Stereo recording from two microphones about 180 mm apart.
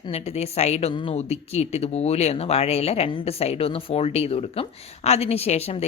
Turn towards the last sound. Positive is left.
turn(degrees=35)  # may be behind; listen again after turning